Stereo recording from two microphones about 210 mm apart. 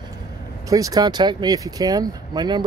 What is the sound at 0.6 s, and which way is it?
Speech, 15° right (ahead or behind).